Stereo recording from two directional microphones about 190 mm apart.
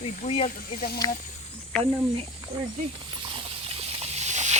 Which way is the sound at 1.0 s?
20° left (ahead or behind).